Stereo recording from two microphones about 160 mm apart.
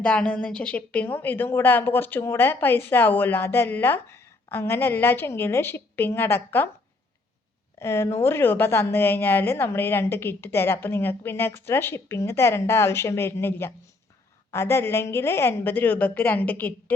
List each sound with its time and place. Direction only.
0.0 s a woman's voice: 5° left (ahead or behind)
7.8 s a woman's voice: 15° left (ahead or behind)